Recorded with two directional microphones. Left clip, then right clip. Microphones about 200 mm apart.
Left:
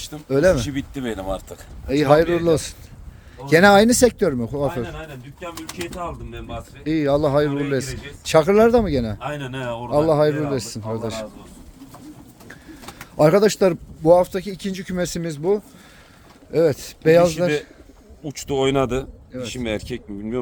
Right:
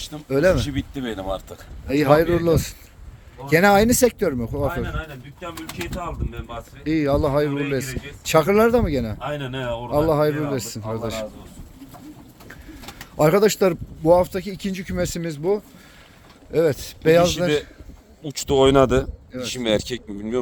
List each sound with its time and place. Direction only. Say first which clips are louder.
0.3 s speech: left 1 dB; 15° left (ahead or behind)
0.5 s speech: left 1 dB; centre (ahead or behind)
3.4 s speech: left 3 dB; 20° left (ahead or behind)
5.4 s speech: left 1 dB; centre (ahead or behind)
9.1 s speech: right 1 dB; centre (ahead or behind)
9.9 s speech: left 2 dB; 10° left (ahead or behind)
13.1 s speech: left 2 dB; 10° left (ahead or behind)
18.2 s speech: right 4 dB; 35° right (ahead or behind)